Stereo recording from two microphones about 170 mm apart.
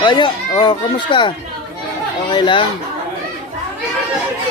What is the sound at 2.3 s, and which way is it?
Speech, 25° left (ahead or behind).